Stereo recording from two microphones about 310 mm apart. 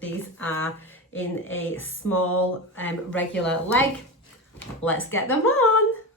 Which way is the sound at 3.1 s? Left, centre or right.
Centre.